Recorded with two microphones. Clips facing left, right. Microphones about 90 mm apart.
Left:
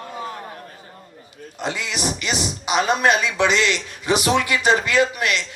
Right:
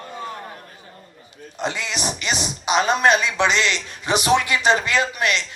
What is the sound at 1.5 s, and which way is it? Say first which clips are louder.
Speech: even; 20° right (ahead or behind).